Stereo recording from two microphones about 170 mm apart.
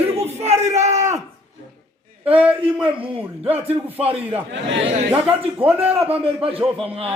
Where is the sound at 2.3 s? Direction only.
5° right (ahead or behind).